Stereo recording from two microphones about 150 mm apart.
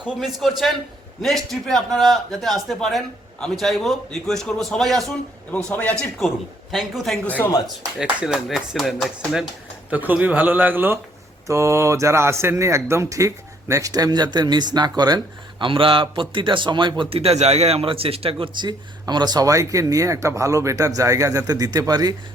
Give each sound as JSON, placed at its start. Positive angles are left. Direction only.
{"t": 0.0, "sound": "a man's voice", "side_deg": 0}
{"t": 7.9, "sound": "a man's voice", "side_deg": -5}